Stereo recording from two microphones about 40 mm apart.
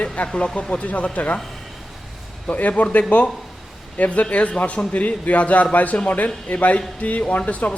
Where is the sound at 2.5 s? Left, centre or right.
Left.